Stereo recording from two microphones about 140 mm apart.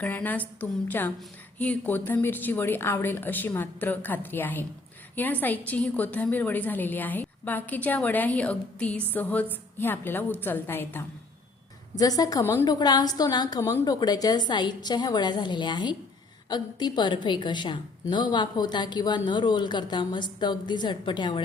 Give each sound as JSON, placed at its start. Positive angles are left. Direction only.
{"t": 0.0, "sound": "a woman's voice", "side_deg": 10}
{"t": 11.9, "sound": "a woman's voice", "side_deg": 25}